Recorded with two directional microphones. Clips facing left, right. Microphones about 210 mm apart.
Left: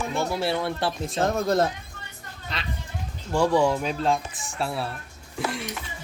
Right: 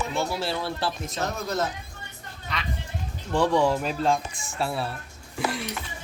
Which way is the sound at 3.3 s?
Centre (ahead or behind).